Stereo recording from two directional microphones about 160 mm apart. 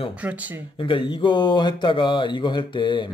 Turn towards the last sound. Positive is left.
turn(degrees=30)  # may be behind; listen again after turning